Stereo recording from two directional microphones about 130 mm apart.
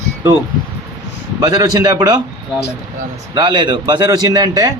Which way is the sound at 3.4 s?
35° right (ahead or behind).